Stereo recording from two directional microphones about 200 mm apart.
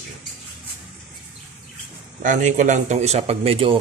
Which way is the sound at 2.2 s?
40° right (ahead or behind).